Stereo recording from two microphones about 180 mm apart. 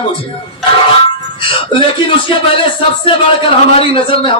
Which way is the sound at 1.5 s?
30° left (ahead or behind).